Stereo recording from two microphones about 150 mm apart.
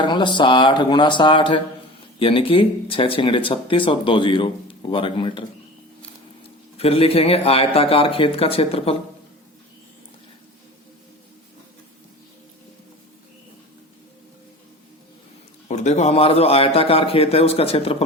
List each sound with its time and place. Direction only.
0.0 s speech: 30° left (ahead or behind)
6.7 s speech: 40° left (ahead or behind)
15.7 s speech: 50° left (ahead or behind)